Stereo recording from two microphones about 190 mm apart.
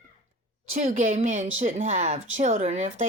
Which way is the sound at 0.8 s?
40° right (ahead or behind).